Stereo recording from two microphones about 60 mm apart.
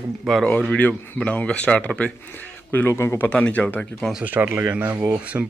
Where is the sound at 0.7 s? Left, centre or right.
Left.